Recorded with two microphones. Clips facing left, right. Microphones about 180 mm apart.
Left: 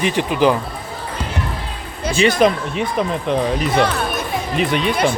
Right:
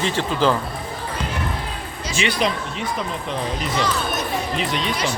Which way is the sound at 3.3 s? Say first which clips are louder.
Left 7 dB; 60° left (ahead or behind).